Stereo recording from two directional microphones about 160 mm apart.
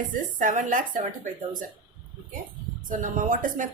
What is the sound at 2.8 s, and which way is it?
Speech, 55° right (ahead or behind).